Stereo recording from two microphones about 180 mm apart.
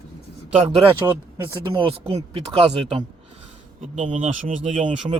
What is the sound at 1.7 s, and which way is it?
Speech, 30° right (ahead or behind).